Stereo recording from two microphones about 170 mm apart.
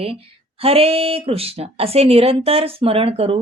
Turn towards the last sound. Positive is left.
turn(degrees=-35)  # may be behind; listen again after turning